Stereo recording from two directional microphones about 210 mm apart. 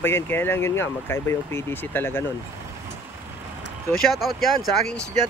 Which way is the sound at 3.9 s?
Centre (ahead or behind).